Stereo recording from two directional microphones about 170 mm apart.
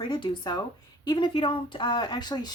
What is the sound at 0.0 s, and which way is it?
Speech, 25° left (ahead or behind).